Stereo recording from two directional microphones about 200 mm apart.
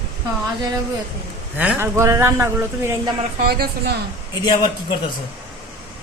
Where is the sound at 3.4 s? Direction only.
50° right (ahead or behind).